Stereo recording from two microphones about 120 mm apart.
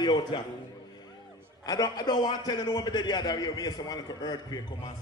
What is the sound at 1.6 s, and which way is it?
A man's voice, 30° left (ahead or behind).